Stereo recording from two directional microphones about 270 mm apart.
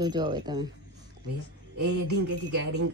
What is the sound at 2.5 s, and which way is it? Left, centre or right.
Speech, right.